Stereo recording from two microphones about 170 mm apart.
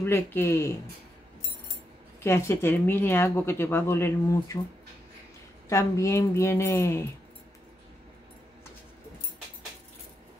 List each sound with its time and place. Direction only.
0.0 s speech: 10° left (ahead or behind)
2.2 s speech: 15° left (ahead or behind)
5.7 s speech: 15° left (ahead or behind)